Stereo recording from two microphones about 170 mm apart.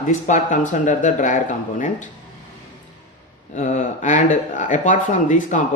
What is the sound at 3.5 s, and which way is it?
Speech, 45° left (ahead or behind).